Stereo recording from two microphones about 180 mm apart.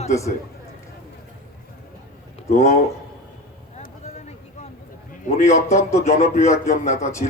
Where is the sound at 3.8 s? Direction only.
40° left (ahead or behind).